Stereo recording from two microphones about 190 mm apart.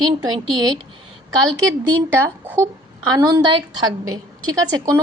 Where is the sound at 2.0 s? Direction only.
10° right (ahead or behind).